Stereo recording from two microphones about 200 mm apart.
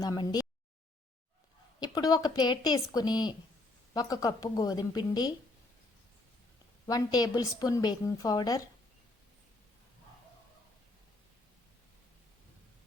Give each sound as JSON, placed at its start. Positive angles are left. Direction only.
{"t": 0.0, "sound": "a woman's voice", "side_deg": 20}
{"t": 1.8, "sound": "a woman's voice", "side_deg": 20}
{"t": 6.8, "sound": "a woman's voice", "side_deg": 20}